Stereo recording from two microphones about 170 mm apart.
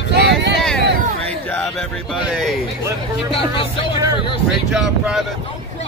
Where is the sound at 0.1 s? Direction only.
90° right.